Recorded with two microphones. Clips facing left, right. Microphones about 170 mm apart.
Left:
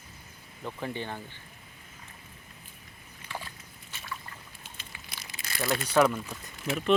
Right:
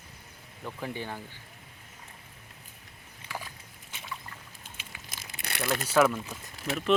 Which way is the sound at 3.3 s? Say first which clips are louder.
Even; 10° right (ahead or behind).